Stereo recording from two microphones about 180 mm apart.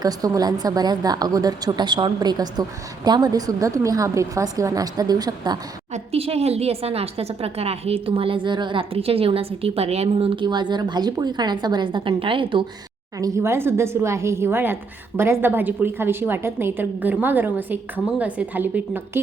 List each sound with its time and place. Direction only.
0.0 s speech: 20° right (ahead or behind)
5.9 s a woman's voice: 35° right (ahead or behind)
13.1 s a woman's voice: 20° right (ahead or behind)